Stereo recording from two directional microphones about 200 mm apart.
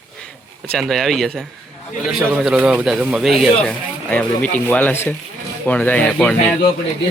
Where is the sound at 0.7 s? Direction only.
Centre (ahead or behind).